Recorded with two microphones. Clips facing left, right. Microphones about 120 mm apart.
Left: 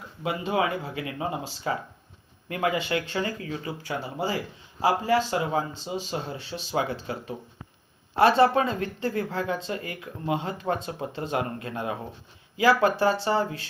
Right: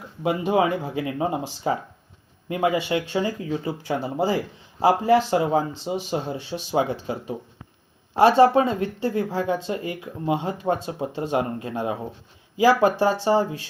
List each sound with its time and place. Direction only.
0.2 s speech: 20° right (ahead or behind)
3.6 s speech: 30° right (ahead or behind)
5.9 s speech: 15° right (ahead or behind)
12.6 s speech: 15° right (ahead or behind)